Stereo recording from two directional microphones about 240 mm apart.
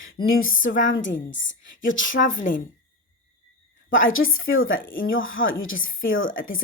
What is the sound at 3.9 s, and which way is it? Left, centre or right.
A woman's voice, left.